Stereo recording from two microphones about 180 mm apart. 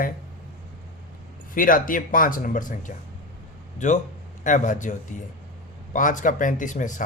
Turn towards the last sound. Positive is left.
turn(degrees=45)  # may be behind; listen again after turning